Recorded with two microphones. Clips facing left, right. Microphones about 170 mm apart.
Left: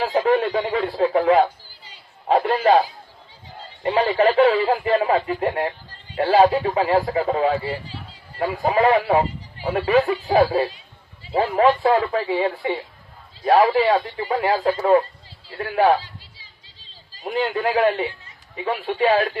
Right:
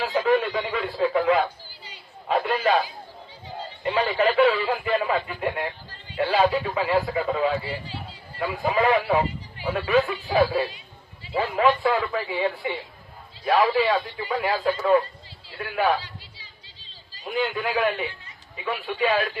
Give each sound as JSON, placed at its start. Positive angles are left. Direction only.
{"t": 0.0, "sound": "speech", "side_deg": 45}
{"t": 3.9, "sound": "speech", "side_deg": 40}
{"t": 17.3, "sound": "speech", "side_deg": 30}